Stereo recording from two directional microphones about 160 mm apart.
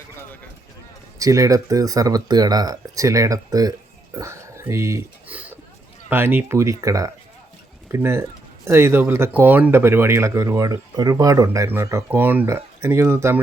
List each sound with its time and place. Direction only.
1.2 s speech: 20° right (ahead or behind)